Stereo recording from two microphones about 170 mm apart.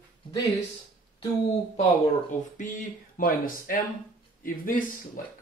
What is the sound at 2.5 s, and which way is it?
Speech, 50° left (ahead or behind).